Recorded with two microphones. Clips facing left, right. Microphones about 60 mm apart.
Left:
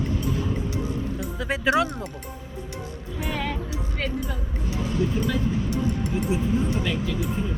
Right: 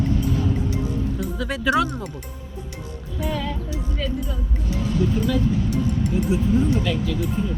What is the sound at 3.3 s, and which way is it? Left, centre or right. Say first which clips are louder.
Music: left 1 dB; left.